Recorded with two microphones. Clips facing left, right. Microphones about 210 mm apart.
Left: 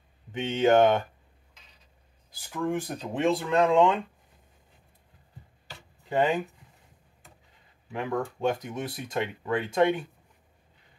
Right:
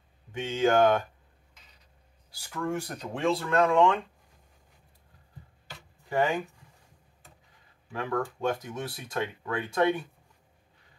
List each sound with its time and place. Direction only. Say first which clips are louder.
0.3 s speech: left 3 dB; 20° left (ahead or behind)
2.3 s speech: left 2 dB; 15° left (ahead or behind)
6.0 s speech: left 2 dB; 20° left (ahead or behind)
7.9 s speech: left 1 dB; 20° left (ahead or behind)